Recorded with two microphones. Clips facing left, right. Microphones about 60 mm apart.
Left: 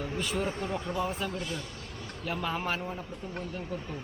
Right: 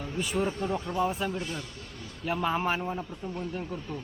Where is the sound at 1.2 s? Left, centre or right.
Centre.